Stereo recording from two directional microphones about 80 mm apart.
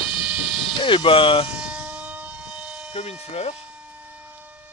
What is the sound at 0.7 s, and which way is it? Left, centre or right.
Speech, left.